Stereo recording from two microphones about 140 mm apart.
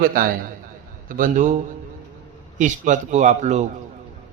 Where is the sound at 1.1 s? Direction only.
70° right (ahead or behind).